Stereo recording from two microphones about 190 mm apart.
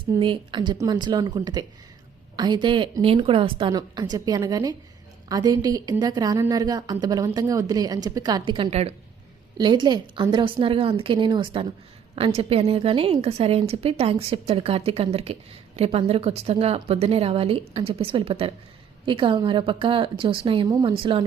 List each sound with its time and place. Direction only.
0.0 s a woman's voice: 25° right (ahead or behind)